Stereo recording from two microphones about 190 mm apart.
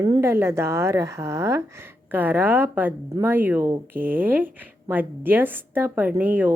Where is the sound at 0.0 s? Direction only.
15° right (ahead or behind).